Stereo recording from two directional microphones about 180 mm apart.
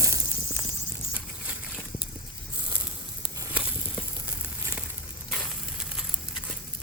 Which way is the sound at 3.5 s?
5° right (ahead or behind).